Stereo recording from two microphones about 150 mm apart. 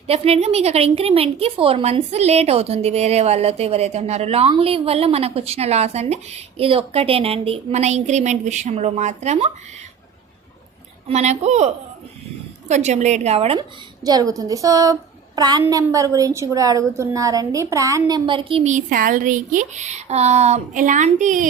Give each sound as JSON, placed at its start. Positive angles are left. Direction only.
{"t": 0.1, "sound": "a woman's voice", "side_deg": -45}
{"t": 11.1, "sound": "a woman's voice", "side_deg": -50}
{"t": 13.6, "sound": "a woman's voice", "side_deg": -25}
{"t": 18.3, "sound": "a woman's voice", "side_deg": -35}
{"t": 18.7, "sound": "speech", "side_deg": -65}